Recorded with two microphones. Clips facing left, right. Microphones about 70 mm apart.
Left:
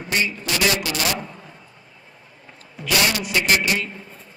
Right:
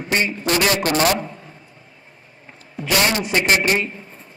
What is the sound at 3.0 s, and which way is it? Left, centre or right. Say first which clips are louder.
Speech: right 4 dB; right.